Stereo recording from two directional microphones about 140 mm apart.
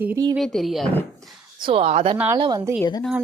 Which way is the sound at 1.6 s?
45° right (ahead or behind).